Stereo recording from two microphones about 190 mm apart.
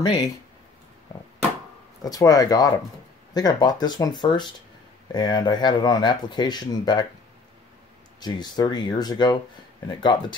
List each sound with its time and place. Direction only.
2.0 s speech: 20° left (ahead or behind)
8.2 s speech: 20° left (ahead or behind)